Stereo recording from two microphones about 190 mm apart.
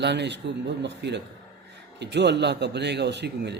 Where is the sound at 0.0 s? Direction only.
65° right (ahead or behind).